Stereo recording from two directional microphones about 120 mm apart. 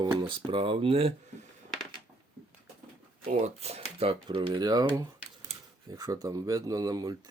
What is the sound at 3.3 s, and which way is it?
Speech, 65° right (ahead or behind).